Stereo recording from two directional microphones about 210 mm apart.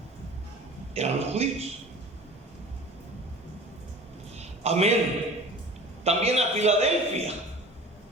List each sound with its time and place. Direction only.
0.9 s a man's voice: 30° right (ahead or behind)
4.4 s a sound: 30° right (ahead or behind)
6.1 s a man's voice: 30° right (ahead or behind)